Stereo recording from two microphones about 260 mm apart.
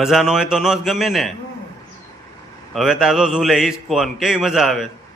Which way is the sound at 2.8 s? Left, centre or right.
Centre.